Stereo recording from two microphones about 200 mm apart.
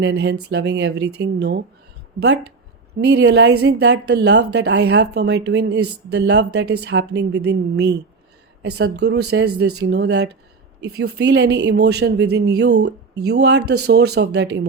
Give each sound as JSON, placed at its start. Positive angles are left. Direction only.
{"t": 0.0, "sound": "speech", "side_deg": -60}